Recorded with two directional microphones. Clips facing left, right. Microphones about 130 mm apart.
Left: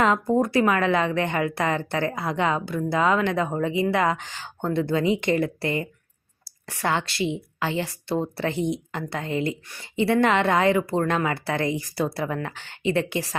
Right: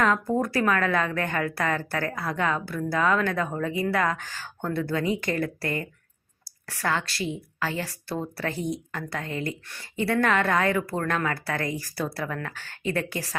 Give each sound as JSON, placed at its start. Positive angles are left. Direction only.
{"t": 0.0, "sound": "a woman's voice", "side_deg": 25}